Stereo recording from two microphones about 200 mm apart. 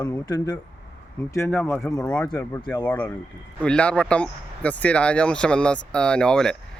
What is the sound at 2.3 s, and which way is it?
Speech, 15° left (ahead or behind).